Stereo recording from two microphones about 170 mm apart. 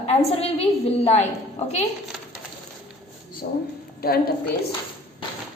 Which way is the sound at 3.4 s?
55° left (ahead or behind).